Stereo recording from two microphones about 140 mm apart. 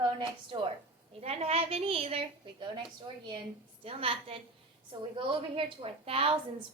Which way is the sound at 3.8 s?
45° right (ahead or behind).